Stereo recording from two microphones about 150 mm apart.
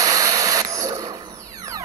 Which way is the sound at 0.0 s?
25° right (ahead or behind).